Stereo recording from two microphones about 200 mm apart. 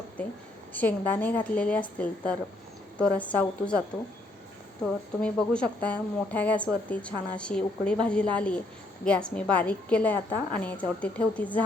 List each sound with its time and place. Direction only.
0.7 s speech: 10° left (ahead or behind)
4.8 s a woman's voice: 5° left (ahead or behind)